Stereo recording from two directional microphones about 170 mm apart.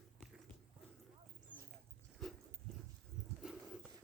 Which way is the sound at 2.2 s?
Centre (ahead or behind).